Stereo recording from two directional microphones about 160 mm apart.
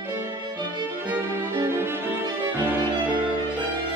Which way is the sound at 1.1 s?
15° right (ahead or behind).